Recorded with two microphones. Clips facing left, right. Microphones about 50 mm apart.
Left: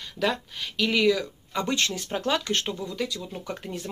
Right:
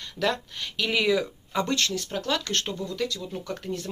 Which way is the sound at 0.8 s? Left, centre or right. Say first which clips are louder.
Left 1 dB; centre.